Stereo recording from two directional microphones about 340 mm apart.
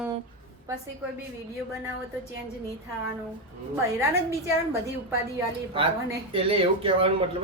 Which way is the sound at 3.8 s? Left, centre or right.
Centre.